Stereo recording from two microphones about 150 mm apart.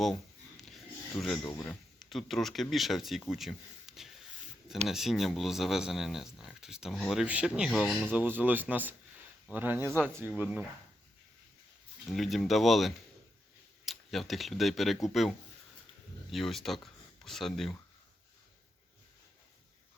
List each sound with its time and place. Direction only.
0.0 s a sound: centre (ahead or behind)
1.5 s speech: 20° left (ahead or behind)
2.0 s speech: centre (ahead or behind)
8.1 s speech: 10° right (ahead or behind)
12.0 s speech: centre (ahead or behind)
16.3 s speech: centre (ahead or behind)